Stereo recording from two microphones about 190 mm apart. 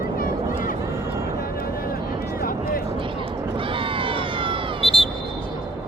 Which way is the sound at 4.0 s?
25° right (ahead or behind).